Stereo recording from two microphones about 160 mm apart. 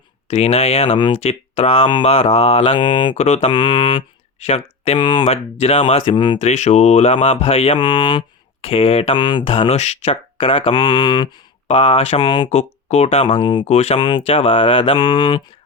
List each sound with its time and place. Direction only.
0.3 s speech: 40° left (ahead or behind)
3.2 s mantra: 40° left (ahead or behind)
3.5 s mantra: 30° left (ahead or behind)
4.4 s speech: 35° left (ahead or behind)
6.4 s speech: 45° left (ahead or behind); by 12.5 s 25° left (ahead or behind)
12.5 s speech: 45° left (ahead or behind)
13.2 s mantra: 30° left (ahead or behind)
13.7 s mantra: 45° left (ahead or behind)
14.2 s speech: 40° left (ahead or behind)